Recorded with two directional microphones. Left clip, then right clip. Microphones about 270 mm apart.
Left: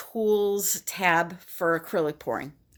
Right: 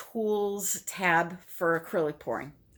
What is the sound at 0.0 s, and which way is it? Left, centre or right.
Speech, left.